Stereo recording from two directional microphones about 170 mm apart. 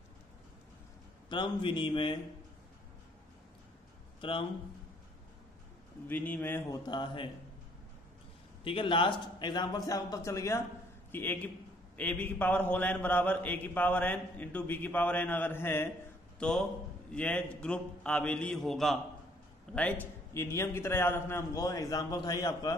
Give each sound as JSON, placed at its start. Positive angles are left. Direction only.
{"t": 1.3, "sound": "a man's voice", "side_deg": 25}
{"t": 4.2, "sound": "speech", "side_deg": 30}
{"t": 6.0, "sound": "a man's voice", "side_deg": 10}
{"t": 6.9, "sound": "a man's voice", "side_deg": 25}
{"t": 8.6, "sound": "a man's voice", "side_deg": 30}